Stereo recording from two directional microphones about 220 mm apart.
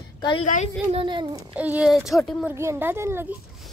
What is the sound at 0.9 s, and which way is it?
Speech, 25° right (ahead or behind).